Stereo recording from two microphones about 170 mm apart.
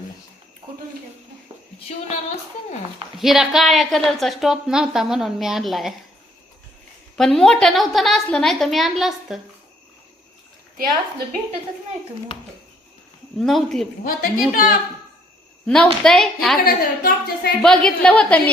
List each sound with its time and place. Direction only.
1.9 s a woman's voice: 40° left (ahead or behind)
3.2 s a woman's voice: 5° right (ahead or behind)
7.2 s a woman's voice: centre (ahead or behind)
13.4 s a woman's voice: centre (ahead or behind)
14.0 s speech: 55° left (ahead or behind)
15.6 s a woman's voice: 5° left (ahead or behind)
16.6 s speech: 60° left (ahead or behind)
17.6 s a woman's voice: 5° left (ahead or behind)